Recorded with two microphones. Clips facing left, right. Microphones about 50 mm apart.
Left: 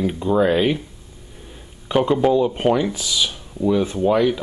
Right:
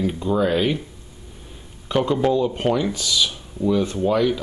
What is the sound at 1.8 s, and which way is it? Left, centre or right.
Speech, centre.